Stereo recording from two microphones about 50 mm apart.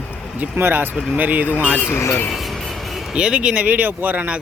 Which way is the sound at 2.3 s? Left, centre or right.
Centre.